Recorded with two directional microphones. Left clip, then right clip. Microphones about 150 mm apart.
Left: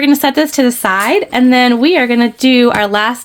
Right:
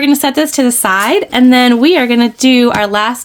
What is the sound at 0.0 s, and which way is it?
A woman's voice, 10° left (ahead or behind).